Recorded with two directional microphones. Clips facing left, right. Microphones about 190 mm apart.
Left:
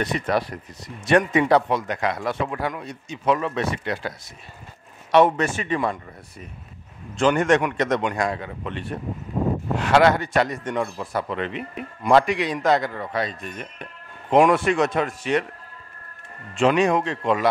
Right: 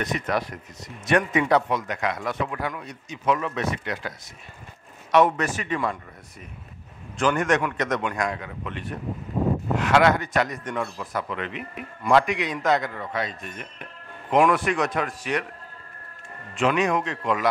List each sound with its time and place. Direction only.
0.0 s a man's voice: 30° left (ahead or behind)
5.1 s a man's voice: 30° left (ahead or behind)
7.2 s a man's voice: 30° left (ahead or behind)
16.5 s a man's voice: 30° left (ahead or behind)